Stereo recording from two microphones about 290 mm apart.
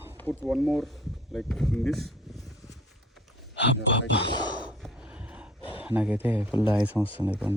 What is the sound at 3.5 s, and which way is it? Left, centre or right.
Speech, left.